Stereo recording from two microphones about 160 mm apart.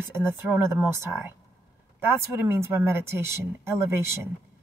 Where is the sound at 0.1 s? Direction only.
15° right (ahead or behind).